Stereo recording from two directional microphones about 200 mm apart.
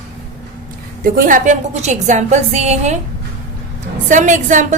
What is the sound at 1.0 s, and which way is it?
A woman's voice, 45° right (ahead or behind).